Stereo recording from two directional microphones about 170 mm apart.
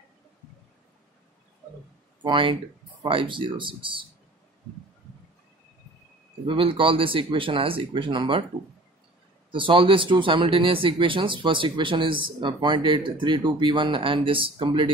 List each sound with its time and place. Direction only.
2.2 s speech: 30° right (ahead or behind)
6.4 s speech: 30° right (ahead or behind)
9.5 s speech: 30° right (ahead or behind)